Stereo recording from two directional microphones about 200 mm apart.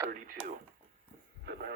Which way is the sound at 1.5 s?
60° right (ahead or behind).